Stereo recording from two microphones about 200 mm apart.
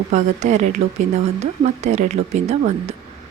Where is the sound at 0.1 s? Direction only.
35° right (ahead or behind).